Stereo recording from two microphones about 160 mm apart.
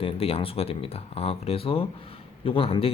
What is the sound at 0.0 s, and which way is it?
Speech, 35° left (ahead or behind).